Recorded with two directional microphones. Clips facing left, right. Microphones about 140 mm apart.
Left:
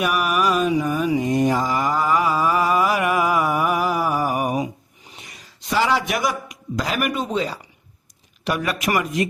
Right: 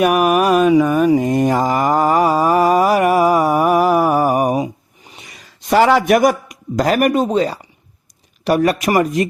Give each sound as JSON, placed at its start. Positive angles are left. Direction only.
{"t": 0.0, "sound": "mantra", "side_deg": -50}
{"t": 1.0, "sound": "mantra", "side_deg": -50}
{"t": 5.5, "sound": "a man's voice", "side_deg": -55}